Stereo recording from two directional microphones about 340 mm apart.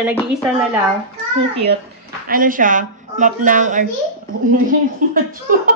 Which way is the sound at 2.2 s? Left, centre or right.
Right.